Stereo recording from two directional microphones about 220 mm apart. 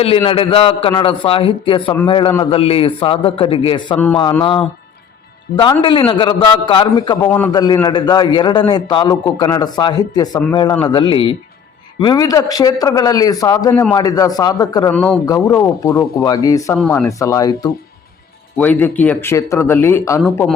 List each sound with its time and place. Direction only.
0.0 s a man's voice: 25° left (ahead or behind)
3.9 s speech: 10° left (ahead or behind)
5.8 s a man's voice: 25° left (ahead or behind)
7.3 s a man's voice: 10° left (ahead or behind)
14.9 s speech: 5° left (ahead or behind)